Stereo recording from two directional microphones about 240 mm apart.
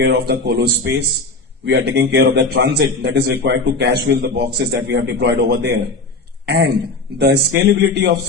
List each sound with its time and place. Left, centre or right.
0.0 s a man's voice: right
6.4 s throat clearing: right
7.2 s a man's voice: right